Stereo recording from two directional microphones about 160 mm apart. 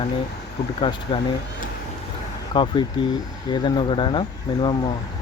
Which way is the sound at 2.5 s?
30° left (ahead or behind).